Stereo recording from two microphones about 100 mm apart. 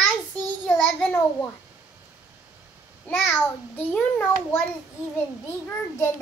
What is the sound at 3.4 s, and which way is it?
Child singing, 10° left (ahead or behind).